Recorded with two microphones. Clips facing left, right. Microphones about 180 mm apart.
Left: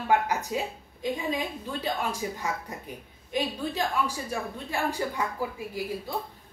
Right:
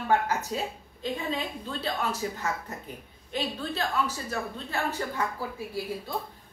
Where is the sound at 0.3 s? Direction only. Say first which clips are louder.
Left 1 dB; 15° left (ahead or behind).